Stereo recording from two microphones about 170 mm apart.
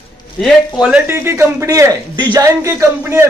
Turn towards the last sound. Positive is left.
turn(degrees=-15)  # may be behind; listen again after turning